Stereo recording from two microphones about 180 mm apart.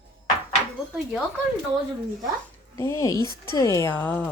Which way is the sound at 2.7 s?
15° left (ahead or behind).